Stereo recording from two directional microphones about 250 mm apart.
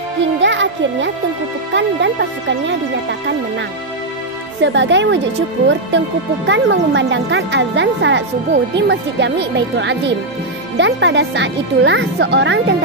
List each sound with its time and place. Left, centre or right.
0.4 s music: right
1.7 s speech: right
4.6 s speech: right